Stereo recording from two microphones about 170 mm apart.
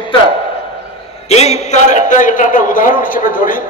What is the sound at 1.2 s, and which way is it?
A man's voice, 40° left (ahead or behind).